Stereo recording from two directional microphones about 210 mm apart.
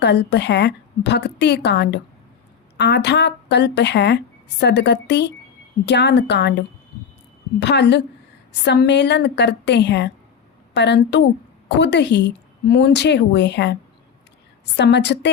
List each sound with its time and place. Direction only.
0.0 s a woman's voice: 55° left (ahead or behind)
14.8 s a woman's voice: 55° left (ahead or behind)